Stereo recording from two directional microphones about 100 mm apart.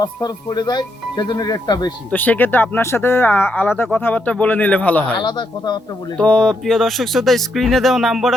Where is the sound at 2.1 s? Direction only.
15° left (ahead or behind).